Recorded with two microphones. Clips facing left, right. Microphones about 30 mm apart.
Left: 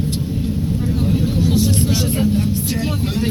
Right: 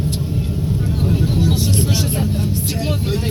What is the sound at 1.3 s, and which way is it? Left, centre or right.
Vehicle, right.